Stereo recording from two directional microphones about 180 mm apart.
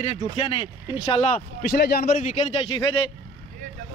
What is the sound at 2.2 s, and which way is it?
Speech, 35° left (ahead or behind).